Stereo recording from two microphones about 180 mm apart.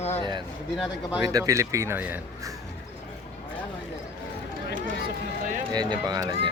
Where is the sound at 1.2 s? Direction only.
20° right (ahead or behind).